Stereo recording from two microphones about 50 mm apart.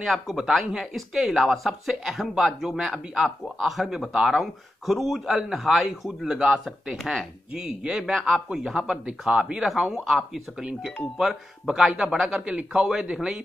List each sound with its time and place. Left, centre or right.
0.0 s a man's voice: centre
8.9 s a man's voice: centre
10.0 s a man's voice: centre